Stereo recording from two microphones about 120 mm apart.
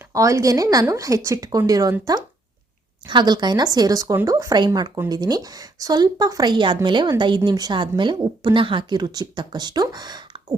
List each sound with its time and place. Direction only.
0.1 s a woman's voice: 25° right (ahead or behind)